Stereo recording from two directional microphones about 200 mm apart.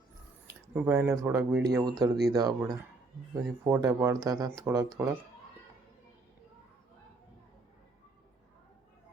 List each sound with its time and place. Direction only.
0.4 s speech: 10° right (ahead or behind)